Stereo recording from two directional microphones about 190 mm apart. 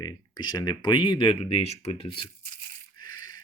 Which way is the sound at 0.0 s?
20° left (ahead or behind).